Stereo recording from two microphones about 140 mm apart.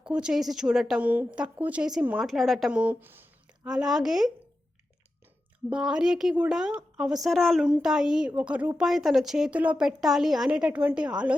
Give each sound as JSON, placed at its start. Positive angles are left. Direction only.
{"t": 0.0, "sound": "a woman's voice", "side_deg": -5}
{"t": 5.7, "sound": "a woman's voice", "side_deg": -5}